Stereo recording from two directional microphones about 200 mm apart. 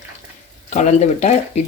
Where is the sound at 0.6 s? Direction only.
35° left (ahead or behind).